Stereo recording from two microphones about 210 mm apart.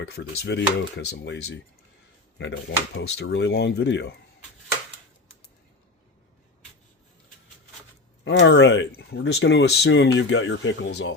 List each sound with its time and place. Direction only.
0.1 s speech: 55° left (ahead or behind)
8.2 s speech: 55° left (ahead or behind)